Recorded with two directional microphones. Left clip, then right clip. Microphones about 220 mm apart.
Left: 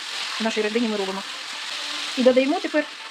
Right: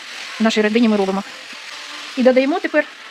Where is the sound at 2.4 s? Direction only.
45° right (ahead or behind).